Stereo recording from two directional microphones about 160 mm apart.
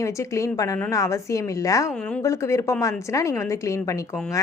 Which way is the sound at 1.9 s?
5° left (ahead or behind).